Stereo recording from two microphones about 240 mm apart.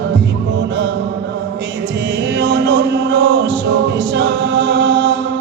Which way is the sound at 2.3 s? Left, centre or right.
Right.